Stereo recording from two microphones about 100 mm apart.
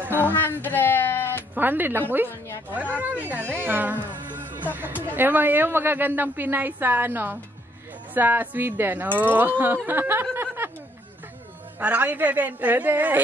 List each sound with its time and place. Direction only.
0.0 s music: 20° right (ahead or behind)
0.3 s music: 20° left (ahead or behind)
1.5 s a woman's voice: 20° right (ahead or behind)
5.1 s a woman's voice: 20° right (ahead or behind)
9.8 s a sound: 20° right (ahead or behind)
11.8 s a woman's voice: 15° right (ahead or behind)